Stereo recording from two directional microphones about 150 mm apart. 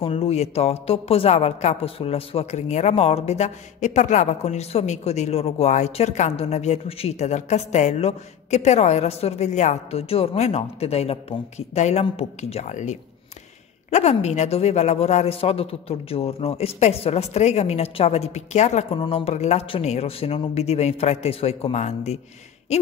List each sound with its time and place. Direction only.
0.0 s a woman's voice: 40° left (ahead or behind)
18.9 s a woman's voice: 40° left (ahead or behind)